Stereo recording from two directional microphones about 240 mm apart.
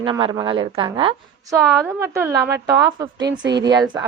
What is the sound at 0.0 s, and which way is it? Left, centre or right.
A woman's voice, centre.